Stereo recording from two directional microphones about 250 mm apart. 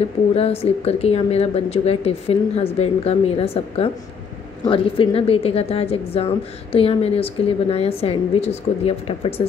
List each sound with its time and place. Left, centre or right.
0.3 s a woman's voice: left